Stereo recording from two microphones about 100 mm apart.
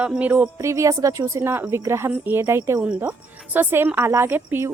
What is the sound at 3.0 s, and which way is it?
A woman's voice, 15° right (ahead or behind).